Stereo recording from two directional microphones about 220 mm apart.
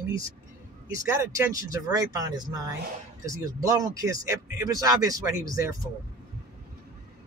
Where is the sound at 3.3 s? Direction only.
15° right (ahead or behind).